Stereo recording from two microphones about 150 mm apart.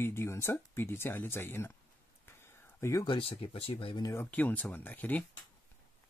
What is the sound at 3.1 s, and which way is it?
Speech, 35° left (ahead or behind).